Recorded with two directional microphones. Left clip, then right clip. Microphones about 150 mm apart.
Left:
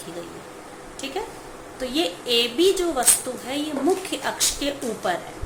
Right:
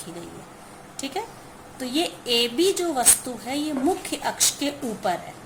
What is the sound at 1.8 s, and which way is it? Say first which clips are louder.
A woman's voice: left 1 dB; 45° right (ahead or behind).